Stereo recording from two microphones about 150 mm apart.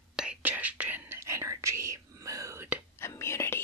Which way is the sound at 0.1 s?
5° right (ahead or behind).